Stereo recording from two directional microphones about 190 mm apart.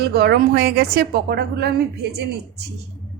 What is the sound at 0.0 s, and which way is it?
A woman's voice, 55° right (ahead or behind).